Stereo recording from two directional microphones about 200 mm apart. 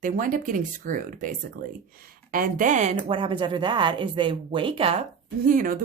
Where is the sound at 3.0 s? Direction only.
25° right (ahead or behind).